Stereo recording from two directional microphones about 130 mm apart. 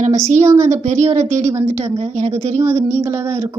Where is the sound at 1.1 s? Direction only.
60° right (ahead or behind).